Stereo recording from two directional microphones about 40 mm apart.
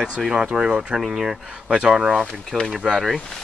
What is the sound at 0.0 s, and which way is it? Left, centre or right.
Speech, centre.